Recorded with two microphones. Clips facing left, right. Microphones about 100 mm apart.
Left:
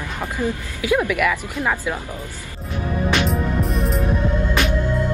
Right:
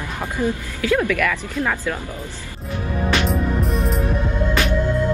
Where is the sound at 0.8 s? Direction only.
15° left (ahead or behind).